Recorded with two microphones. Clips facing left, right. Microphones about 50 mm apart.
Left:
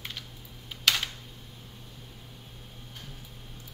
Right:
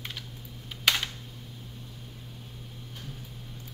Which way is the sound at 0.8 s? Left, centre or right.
Centre.